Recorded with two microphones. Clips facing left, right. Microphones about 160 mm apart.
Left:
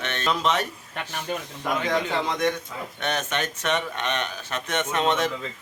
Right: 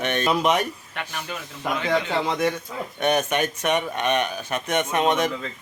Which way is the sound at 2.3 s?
5° right (ahead or behind).